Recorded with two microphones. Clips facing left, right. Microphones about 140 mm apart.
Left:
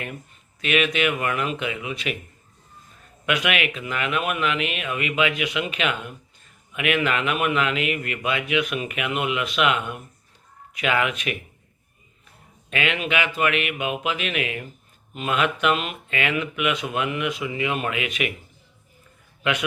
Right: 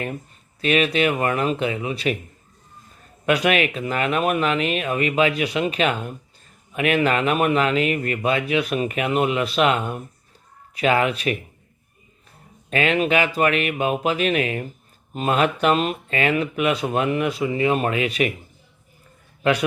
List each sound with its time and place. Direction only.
0.6 s speech: 35° right (ahead or behind)
3.2 s speech: 35° right (ahead or behind)
12.7 s speech: 35° right (ahead or behind)
19.4 s a man's voice: 35° right (ahead or behind)